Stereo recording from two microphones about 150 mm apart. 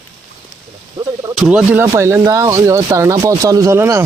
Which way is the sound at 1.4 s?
5° right (ahead or behind).